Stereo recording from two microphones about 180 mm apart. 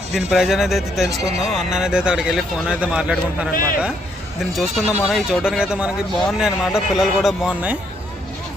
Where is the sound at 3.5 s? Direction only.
50° left (ahead or behind).